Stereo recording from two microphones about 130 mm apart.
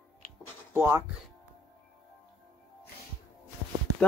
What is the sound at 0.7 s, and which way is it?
Speech, 20° right (ahead or behind).